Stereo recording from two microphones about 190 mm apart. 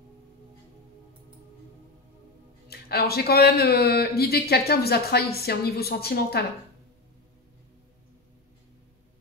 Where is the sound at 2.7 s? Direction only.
55° left (ahead or behind).